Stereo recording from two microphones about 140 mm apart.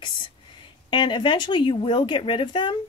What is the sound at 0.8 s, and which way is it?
Speech, 35° left (ahead or behind).